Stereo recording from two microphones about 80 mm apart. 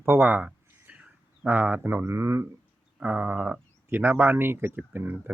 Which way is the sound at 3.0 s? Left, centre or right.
Centre.